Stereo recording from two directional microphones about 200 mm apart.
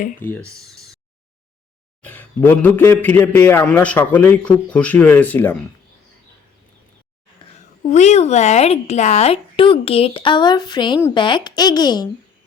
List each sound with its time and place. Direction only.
0.2 s a man's voice: 10° left (ahead or behind)
2.0 s a man's voice: 10° left (ahead or behind)
7.9 s speech: 35° left (ahead or behind)